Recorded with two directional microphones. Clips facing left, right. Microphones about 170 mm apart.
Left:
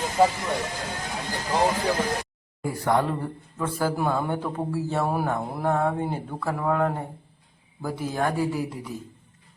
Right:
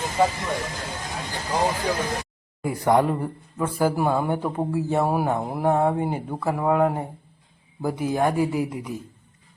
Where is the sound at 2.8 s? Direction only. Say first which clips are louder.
Right 4 dB; 15° right (ahead or behind).